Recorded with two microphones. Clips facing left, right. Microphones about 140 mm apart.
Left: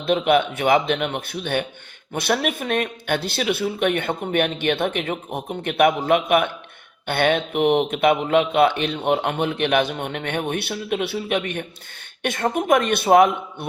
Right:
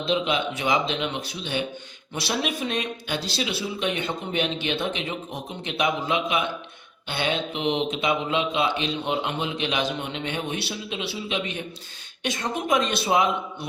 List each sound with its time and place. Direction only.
0.0 s speech: 55° left (ahead or behind)